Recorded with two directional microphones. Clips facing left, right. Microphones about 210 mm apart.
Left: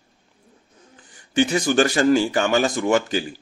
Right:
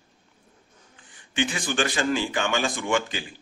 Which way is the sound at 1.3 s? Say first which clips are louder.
Left 8 dB; 40° left (ahead or behind).